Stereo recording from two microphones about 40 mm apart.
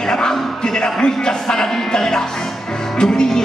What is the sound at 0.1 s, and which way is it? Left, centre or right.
Music, centre.